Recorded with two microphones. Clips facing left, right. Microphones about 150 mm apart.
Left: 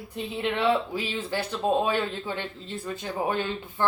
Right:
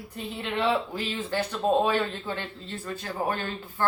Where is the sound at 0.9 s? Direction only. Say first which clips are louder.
Left 1 dB; 10° left (ahead or behind).